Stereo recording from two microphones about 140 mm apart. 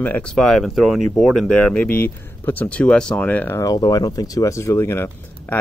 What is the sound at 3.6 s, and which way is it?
Speech, 25° left (ahead or behind).